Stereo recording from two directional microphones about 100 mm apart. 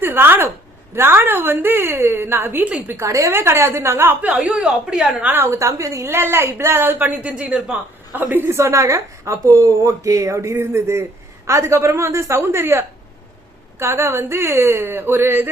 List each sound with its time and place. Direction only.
0.0 s a sound: 20° right (ahead or behind)
0.9 s a woman's voice: 25° right (ahead or behind)
2.9 s a woman's voice: 30° right (ahead or behind); by 5.3 s 10° right (ahead or behind)
5.3 s a woman's voice: 25° right (ahead or behind)